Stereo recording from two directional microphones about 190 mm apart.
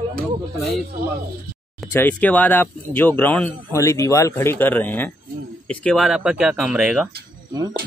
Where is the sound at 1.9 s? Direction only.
10° left (ahead or behind).